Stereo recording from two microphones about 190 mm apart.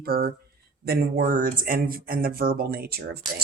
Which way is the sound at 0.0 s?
55° right (ahead or behind).